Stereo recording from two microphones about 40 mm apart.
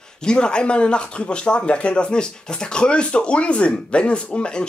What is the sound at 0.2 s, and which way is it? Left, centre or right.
Speech, left.